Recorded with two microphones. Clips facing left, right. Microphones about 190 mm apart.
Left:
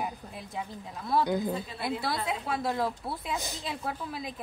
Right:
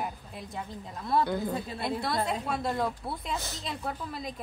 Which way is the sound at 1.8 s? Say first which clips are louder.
Right 2 dB; 5° left (ahead or behind).